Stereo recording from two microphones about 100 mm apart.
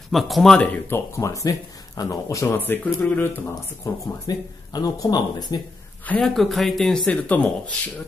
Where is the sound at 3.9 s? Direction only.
35° left (ahead or behind).